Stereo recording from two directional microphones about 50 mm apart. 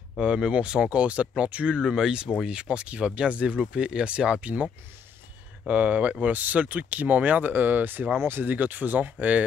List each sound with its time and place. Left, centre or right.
0.2 s speech: centre
5.7 s speech: right